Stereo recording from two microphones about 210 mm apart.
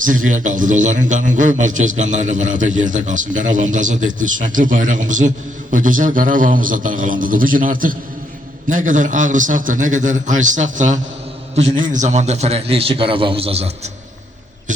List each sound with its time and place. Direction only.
0.3 s a man's voice: 40° right (ahead or behind)